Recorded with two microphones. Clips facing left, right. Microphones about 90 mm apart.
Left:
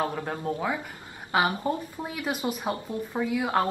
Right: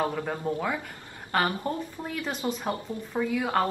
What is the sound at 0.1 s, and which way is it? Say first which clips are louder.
A woman's voice: right 1 dB; 5° left (ahead or behind).